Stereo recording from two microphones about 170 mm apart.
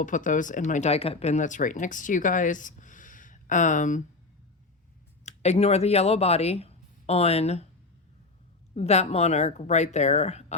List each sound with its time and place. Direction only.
0.0 s speech: 50° left (ahead or behind)
5.2 s speech: 40° left (ahead or behind)
8.7 s speech: 40° left (ahead or behind)